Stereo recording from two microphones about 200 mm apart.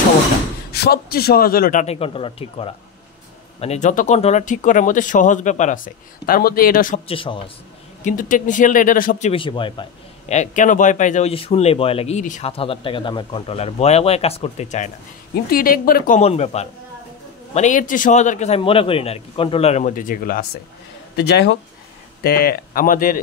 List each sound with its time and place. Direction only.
0.7 s a man's voice: 50° left (ahead or behind)
7.1 s a man's voice: 25° left (ahead or behind)
8.0 s a man's voice: 40° left (ahead or behind)
9.3 s a man's voice: 25° left (ahead or behind)
15.5 s speech: 45° left (ahead or behind)
16.2 s a man's voice: 30° left (ahead or behind)